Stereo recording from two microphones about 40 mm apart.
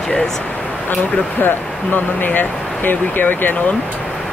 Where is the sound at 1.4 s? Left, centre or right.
Left.